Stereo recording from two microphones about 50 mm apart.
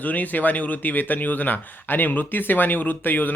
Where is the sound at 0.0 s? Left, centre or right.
Left.